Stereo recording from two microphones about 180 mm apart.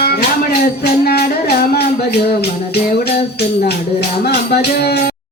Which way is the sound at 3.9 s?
65° left (ahead or behind).